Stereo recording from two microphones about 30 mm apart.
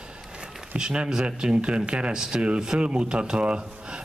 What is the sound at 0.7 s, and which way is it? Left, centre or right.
A man's voice, right.